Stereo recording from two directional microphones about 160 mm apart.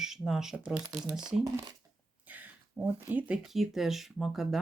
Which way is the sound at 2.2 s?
10° right (ahead or behind).